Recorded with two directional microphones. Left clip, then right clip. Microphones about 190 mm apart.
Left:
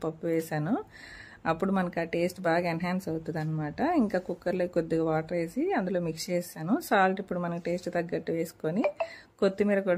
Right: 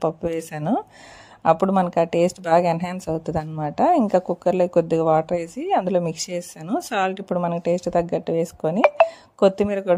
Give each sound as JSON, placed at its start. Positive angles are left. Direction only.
{"t": 0.0, "sound": "a woman's voice", "side_deg": -30}